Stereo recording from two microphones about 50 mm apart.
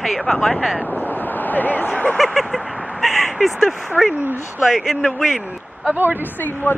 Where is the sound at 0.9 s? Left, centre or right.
Left.